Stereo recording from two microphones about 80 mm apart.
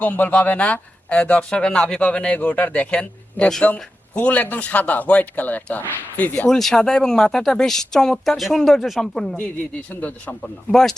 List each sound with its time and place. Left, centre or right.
0.0 s speech: centre
6.5 s speech: centre
9.9 s speech: centre
10.4 s speech: centre